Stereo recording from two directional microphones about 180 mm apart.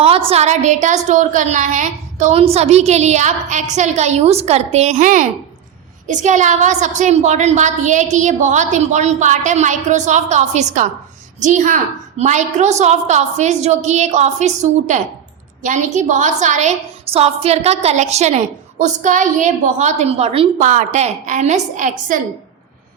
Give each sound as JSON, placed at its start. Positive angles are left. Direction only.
{"t": 0.0, "sound": "a woman's voice", "side_deg": -30}